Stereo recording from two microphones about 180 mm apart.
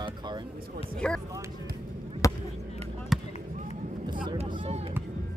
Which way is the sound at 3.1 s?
Centre (ahead or behind).